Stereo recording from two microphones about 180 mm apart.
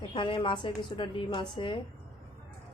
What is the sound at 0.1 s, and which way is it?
A woman's voice, 30° left (ahead or behind).